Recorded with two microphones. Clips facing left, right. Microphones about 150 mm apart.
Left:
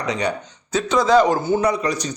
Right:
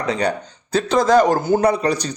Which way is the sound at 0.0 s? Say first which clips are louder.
Right 2 dB; 35° right (ahead or behind).